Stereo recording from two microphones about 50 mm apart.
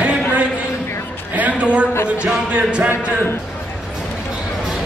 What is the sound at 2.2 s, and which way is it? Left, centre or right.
Music, right.